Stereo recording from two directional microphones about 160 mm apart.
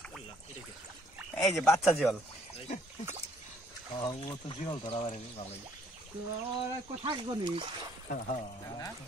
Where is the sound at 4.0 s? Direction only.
25° left (ahead or behind).